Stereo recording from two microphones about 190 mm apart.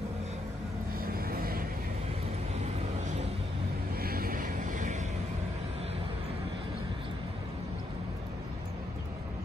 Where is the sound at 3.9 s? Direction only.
50° right (ahead or behind).